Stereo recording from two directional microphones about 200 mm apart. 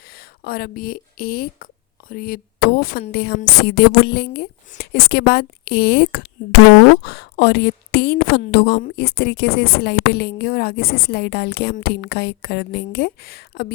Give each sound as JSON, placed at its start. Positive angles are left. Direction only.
{"t": 0.4, "sound": "a woman's voice", "side_deg": 45}